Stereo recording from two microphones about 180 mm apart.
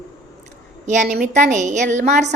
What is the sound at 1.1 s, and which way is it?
A woman's voice, 45° right (ahead or behind).